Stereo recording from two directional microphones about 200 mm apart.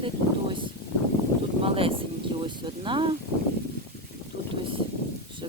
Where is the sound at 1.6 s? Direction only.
25° right (ahead or behind).